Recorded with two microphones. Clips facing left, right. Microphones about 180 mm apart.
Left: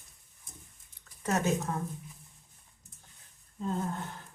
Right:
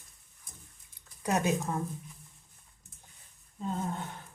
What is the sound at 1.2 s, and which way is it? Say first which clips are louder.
Speech: right 1 dB; 15° right (ahead or behind).